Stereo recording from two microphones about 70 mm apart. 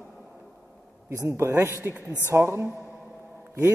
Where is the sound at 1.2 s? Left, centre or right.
Right.